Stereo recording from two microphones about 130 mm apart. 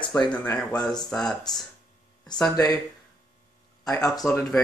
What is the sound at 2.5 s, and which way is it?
Speech, 30° left (ahead or behind).